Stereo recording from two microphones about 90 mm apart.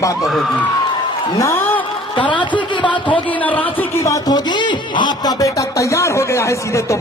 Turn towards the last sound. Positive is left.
turn(degrees=35)  # may be behind; listen again after turning